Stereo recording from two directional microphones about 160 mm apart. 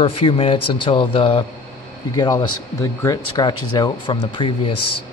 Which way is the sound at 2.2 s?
25° left (ahead or behind).